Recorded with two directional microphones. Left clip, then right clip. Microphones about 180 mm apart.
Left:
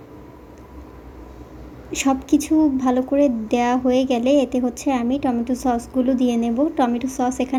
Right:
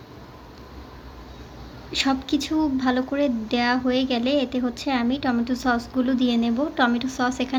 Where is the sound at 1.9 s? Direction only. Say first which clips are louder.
Left 4 dB; 20° left (ahead or behind).